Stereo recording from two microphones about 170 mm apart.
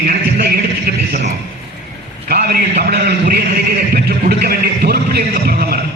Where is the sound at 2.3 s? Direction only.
65° right (ahead or behind).